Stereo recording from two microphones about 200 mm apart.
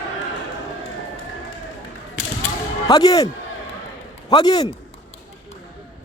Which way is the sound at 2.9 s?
20° left (ahead or behind).